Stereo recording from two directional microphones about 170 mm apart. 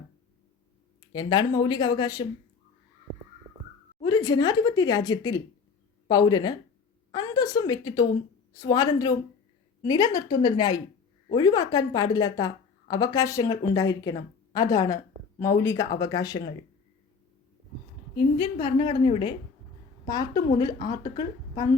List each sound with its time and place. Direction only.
1.1 s a woman's voice: 25° left (ahead or behind)
4.0 s a woman's voice: 25° left (ahead or behind)
18.3 s a woman's voice: 30° left (ahead or behind)